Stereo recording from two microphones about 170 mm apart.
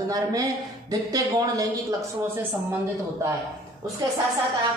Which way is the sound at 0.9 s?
20° right (ahead or behind).